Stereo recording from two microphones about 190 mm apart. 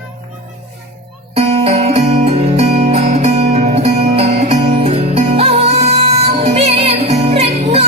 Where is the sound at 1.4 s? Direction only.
30° right (ahead or behind).